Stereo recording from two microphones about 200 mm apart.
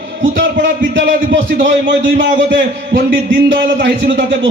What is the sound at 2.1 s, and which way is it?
A man's voice, 60° right (ahead or behind).